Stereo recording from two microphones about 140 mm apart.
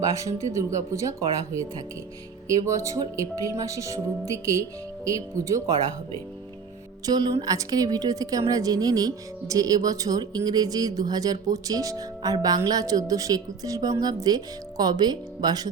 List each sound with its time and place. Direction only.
0.1 s a woman's voice: 25° right (ahead or behind)
2.6 s a woman's voice: 20° right (ahead or behind)
7.0 s a woman's voice: 30° right (ahead or behind)